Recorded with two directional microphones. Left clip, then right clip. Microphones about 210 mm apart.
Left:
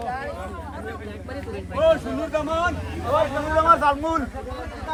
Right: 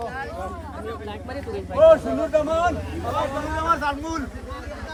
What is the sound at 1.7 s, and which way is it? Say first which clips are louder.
Speech: right 5 dB; 40° right (ahead or behind).